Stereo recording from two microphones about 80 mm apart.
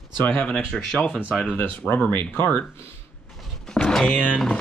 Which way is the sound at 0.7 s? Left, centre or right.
Centre.